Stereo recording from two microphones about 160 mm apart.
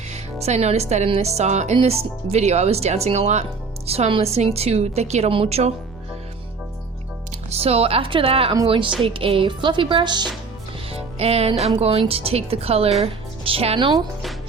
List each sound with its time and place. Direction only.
0.1 s a woman's voice: 45° right (ahead or behind)
7.3 s a woman's voice: 40° right (ahead or behind)
10.9 s music: 40° right (ahead or behind)
11.8 s a woman's voice: 40° right (ahead or behind)